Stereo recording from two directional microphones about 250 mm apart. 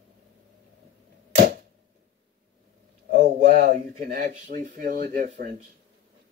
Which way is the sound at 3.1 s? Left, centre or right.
Right.